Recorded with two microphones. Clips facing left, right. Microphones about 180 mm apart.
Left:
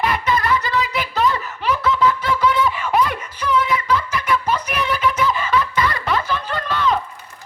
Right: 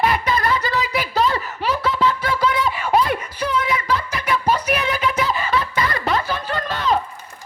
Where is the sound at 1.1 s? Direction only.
35° right (ahead or behind).